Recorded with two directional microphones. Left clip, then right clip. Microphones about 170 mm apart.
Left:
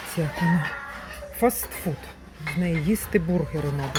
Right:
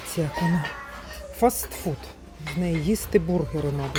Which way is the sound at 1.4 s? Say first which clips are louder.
Right 1 dB; 15° right (ahead or behind).